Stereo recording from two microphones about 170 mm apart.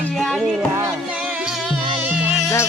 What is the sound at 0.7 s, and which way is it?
Music, 10° right (ahead or behind).